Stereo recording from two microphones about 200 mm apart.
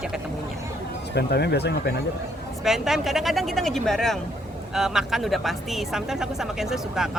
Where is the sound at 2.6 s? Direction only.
Centre (ahead or behind).